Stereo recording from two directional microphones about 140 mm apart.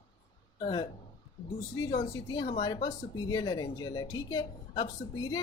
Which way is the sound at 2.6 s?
30° left (ahead or behind).